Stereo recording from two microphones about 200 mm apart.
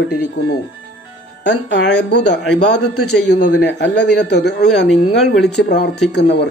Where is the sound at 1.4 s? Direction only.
60° left (ahead or behind).